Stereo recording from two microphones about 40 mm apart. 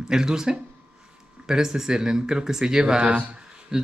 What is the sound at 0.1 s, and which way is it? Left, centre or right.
Speech, centre.